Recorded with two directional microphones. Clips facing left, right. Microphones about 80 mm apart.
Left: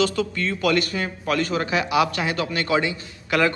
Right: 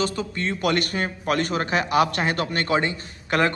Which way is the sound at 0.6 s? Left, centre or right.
Right.